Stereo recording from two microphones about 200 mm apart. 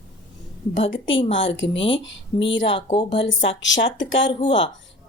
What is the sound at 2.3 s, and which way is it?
Speech, 20° left (ahead or behind).